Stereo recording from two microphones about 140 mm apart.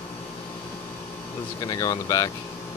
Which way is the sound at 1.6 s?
25° left (ahead or behind).